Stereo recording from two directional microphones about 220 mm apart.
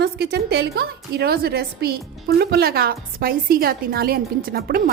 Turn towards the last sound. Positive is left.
turn(degrees=-45)  # may be behind; listen again after turning